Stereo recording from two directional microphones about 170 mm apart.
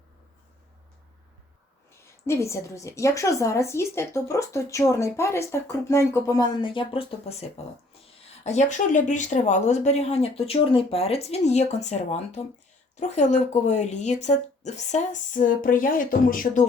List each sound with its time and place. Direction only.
2.0 s a woman's voice: 15° left (ahead or behind); by 16.6 s 55° left (ahead or behind)